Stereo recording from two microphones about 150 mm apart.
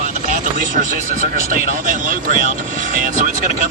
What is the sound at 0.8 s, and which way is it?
Speech, 65° right (ahead or behind).